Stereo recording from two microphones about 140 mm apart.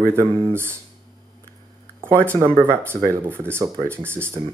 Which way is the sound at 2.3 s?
20° right (ahead or behind).